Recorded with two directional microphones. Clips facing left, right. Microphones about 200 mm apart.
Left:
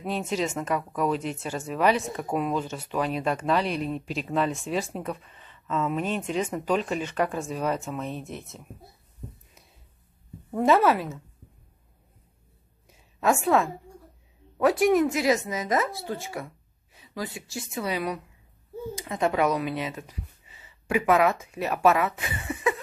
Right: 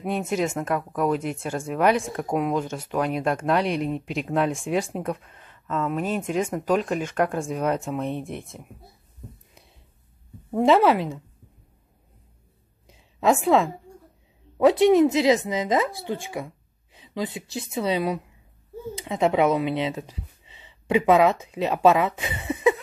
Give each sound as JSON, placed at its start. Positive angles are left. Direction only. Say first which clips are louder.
{"t": 0.0, "sound": "speech", "louder": "right 3 dB", "side_deg": -10}
{"t": 10.5, "sound": "speech", "louder": "right 3 dB", "side_deg": -15}
{"t": 12.8, "sound": "a sound", "louder": "right 3 dB", "side_deg": -15}
{"t": 14.6, "sound": "speech", "louder": "right 4 dB", "side_deg": -20}